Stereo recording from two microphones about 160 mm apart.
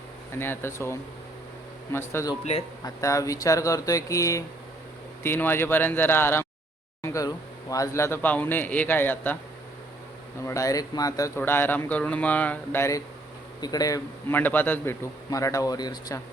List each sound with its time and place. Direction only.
0.3 s speech: 15° left (ahead or behind)
2.4 s a man's voice: 40° left (ahead or behind)
2.8 s a man's voice: 20° left (ahead or behind)
10.4 s a man's voice: 20° left (ahead or behind)
14.3 s a man's voice: 10° left (ahead or behind)